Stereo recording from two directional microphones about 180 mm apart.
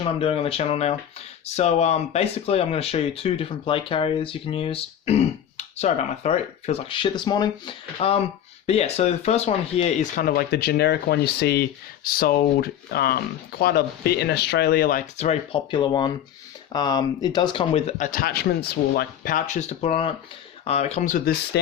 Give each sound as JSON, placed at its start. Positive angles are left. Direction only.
{"t": 0.0, "sound": "speech", "side_deg": 30}
{"t": 10.2, "sound": "speech", "side_deg": 60}
{"t": 12.0, "sound": "speech", "side_deg": 55}
{"t": 21.5, "sound": "speech", "side_deg": 70}